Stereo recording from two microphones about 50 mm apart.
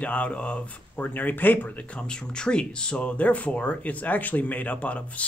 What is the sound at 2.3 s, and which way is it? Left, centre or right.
Speech, centre.